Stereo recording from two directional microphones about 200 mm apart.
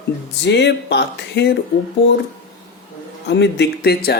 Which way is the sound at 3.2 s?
60° left (ahead or behind).